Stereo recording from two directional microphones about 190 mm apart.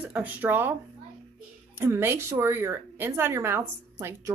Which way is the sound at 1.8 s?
15° right (ahead or behind).